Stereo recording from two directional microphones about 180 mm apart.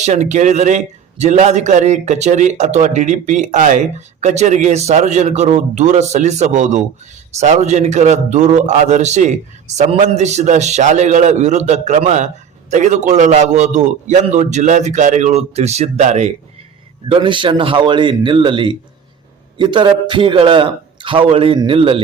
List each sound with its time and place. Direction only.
0.0 s a man's voice: 40° right (ahead or behind)
17.1 s a man's voice: 25° right (ahead or behind)